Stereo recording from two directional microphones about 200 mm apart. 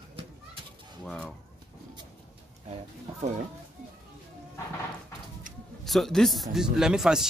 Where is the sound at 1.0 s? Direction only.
5° left (ahead or behind).